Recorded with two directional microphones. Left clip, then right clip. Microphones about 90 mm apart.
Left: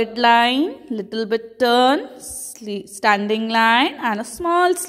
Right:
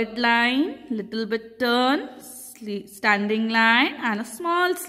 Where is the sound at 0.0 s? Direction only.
30° left (ahead or behind).